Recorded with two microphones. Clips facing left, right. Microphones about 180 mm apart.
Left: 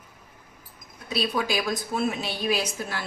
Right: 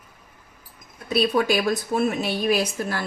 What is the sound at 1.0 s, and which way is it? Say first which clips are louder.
A woman's voice: right 6 dB; 55° right (ahead or behind).